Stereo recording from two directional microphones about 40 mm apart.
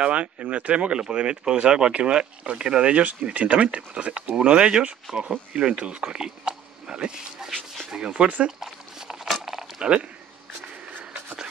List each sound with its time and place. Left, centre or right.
0.0 s speech: right
5.2 s speech: right
5.6 s speech: right; by 7.8 s centre
7.9 s speech: right
8.5 s dog: centre
9.8 s speech: right